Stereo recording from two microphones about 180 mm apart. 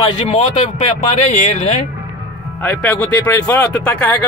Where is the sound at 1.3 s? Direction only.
40° left (ahead or behind).